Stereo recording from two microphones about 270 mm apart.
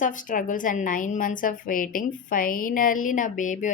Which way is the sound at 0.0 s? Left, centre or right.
Left.